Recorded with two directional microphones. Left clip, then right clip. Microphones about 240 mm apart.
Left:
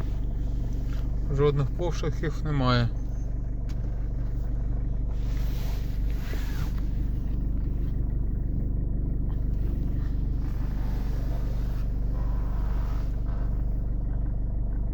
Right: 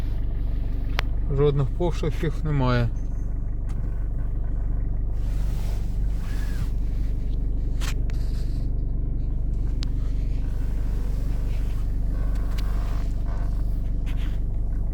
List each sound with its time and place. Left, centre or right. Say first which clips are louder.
1.3 s speech: right 2 dB; right